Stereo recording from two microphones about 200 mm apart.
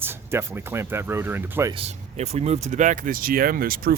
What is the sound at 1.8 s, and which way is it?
Speech, 30° right (ahead or behind).